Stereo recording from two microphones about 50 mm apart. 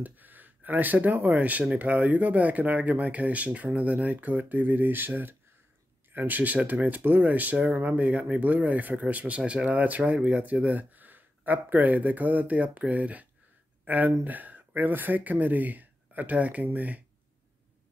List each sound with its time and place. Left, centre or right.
0.0 s speech: right